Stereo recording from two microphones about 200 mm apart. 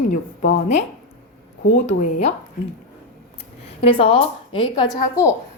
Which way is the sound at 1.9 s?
35° left (ahead or behind).